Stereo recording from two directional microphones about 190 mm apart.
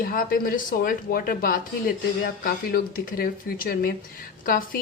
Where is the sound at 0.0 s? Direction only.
50° left (ahead or behind).